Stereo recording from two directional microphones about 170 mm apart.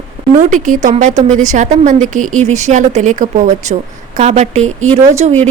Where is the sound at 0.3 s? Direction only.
50° right (ahead or behind).